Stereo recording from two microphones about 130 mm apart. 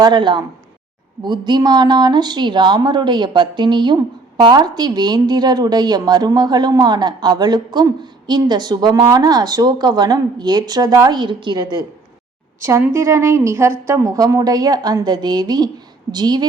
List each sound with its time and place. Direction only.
0.0 s speech: 35° right (ahead or behind)
12.5 s a woman's voice: 20° right (ahead or behind)